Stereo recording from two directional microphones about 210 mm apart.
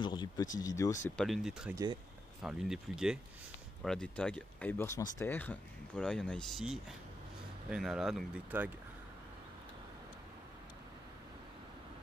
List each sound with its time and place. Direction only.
0.0 s speech: 20° left (ahead or behind)
1.1 s speech: centre (ahead or behind)